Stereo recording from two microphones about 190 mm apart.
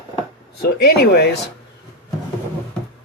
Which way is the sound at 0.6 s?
60° left (ahead or behind).